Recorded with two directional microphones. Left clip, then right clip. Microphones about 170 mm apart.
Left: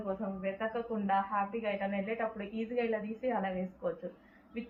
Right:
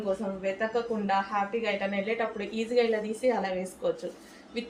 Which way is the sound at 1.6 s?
50° right (ahead or behind).